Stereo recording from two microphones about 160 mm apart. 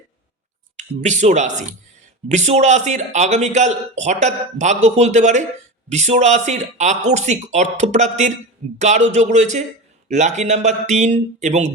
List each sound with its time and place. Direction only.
0.8 s a man's voice: 45° right (ahead or behind)